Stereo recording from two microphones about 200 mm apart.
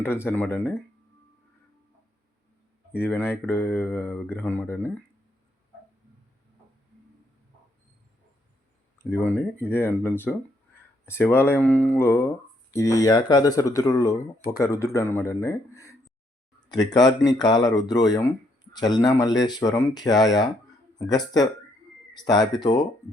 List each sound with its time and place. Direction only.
0.0 s speech: 10° left (ahead or behind)
2.9 s speech: 10° left (ahead or behind)
9.0 s speech: 10° left (ahead or behind)